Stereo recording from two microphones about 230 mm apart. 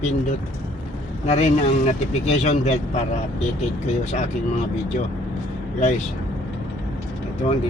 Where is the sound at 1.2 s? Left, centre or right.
Left.